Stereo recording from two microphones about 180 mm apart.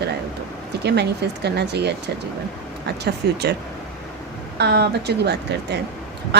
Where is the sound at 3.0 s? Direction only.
65° right (ahead or behind).